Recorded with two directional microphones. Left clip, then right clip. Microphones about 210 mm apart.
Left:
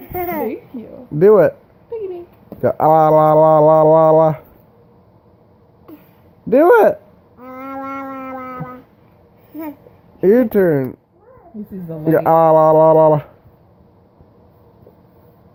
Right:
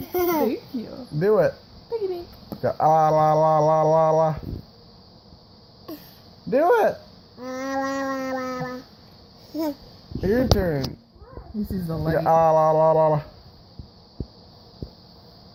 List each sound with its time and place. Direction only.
0.1 s babbling: 10° right (ahead or behind)
1.2 s speech: 45° left (ahead or behind)
2.6 s speech: 45° left (ahead or behind)
6.5 s speech: 45° left (ahead or behind)
7.4 s a sound: 5° left (ahead or behind)
10.2 s speech: 45° left (ahead or behind)
12.1 s speech: 45° left (ahead or behind)